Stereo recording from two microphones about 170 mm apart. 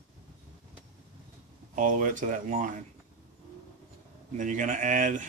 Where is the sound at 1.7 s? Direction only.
50° right (ahead or behind).